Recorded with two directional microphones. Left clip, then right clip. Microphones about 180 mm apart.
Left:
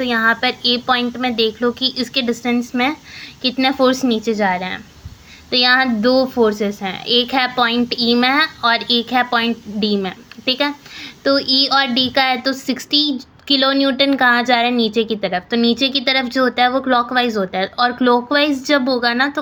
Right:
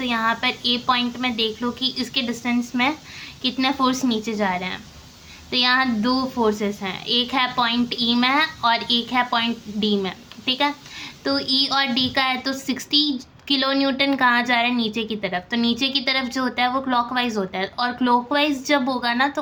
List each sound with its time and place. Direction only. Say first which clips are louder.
0.0 s a woman's voice: left 6 dB; 25° left (ahead or behind)